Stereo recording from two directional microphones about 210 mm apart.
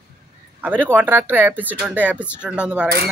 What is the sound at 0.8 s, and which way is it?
Speech, 10° right (ahead or behind).